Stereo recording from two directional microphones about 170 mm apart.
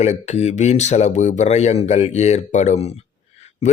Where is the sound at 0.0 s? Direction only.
40° left (ahead or behind).